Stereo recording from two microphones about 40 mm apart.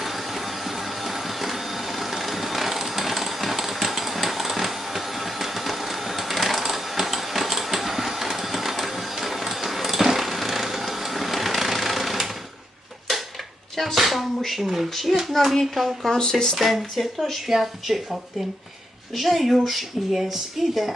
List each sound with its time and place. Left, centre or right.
0.0 s printer: centre
13.7 s a sound: centre
14.8 s speech: centre
16.1 s speech: centre
16.6 s speech: centre